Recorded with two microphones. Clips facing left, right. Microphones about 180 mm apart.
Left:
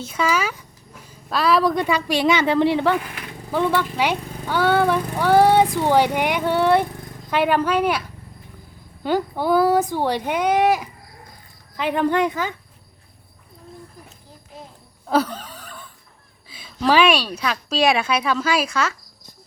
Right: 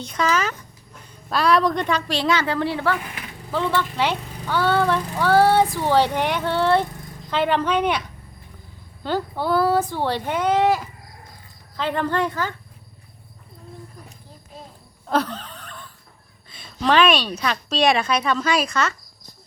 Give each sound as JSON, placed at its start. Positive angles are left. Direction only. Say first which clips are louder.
{"t": 0.0, "sound": "speech", "louder": "even", "side_deg": 5}
{"t": 9.0, "sound": "speech", "louder": "left 3 dB", "side_deg": 15}
{"t": 15.0, "sound": "a sound", "louder": "left 2 dB", "side_deg": 5}
{"t": 16.5, "sound": "a woman's voice", "louder": "left 1 dB", "side_deg": 5}